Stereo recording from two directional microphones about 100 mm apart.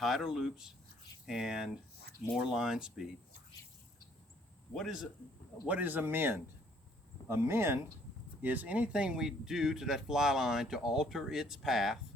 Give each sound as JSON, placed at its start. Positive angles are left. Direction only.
{"t": 0.0, "sound": "speech", "side_deg": 0}
{"t": 4.7, "sound": "speech", "side_deg": 0}
{"t": 5.6, "sound": "speech", "side_deg": -15}